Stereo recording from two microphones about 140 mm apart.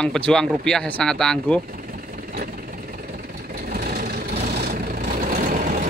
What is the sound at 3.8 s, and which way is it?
Vehicle, 90° right.